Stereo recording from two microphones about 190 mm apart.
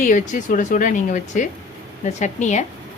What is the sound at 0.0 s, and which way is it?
Speech, 45° left (ahead or behind).